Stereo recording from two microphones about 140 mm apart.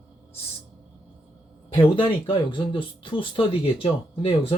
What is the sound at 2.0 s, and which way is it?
Speech, 40° left (ahead or behind).